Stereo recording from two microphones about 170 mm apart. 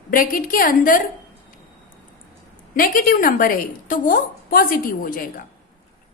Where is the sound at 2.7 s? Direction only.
55° left (ahead or behind).